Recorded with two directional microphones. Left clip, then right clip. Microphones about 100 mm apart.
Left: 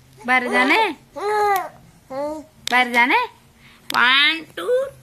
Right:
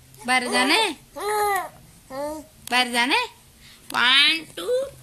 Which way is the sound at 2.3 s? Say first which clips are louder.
Left 4 dB; 15° right (ahead or behind).